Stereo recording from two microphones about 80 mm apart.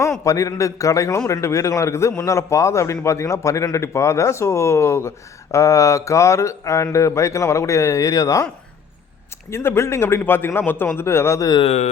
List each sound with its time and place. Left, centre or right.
0.3 s a man's voice: left
9.5 s a man's voice: left
11.3 s a man's voice: left